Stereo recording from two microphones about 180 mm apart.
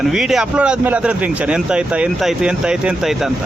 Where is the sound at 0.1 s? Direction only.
Centre (ahead or behind).